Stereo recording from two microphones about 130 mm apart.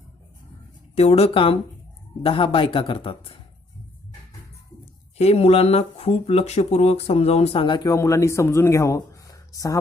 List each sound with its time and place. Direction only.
0.9 s speech: 50° left (ahead or behind)
5.1 s speech: 50° left (ahead or behind); by 9.7 s 25° left (ahead or behind)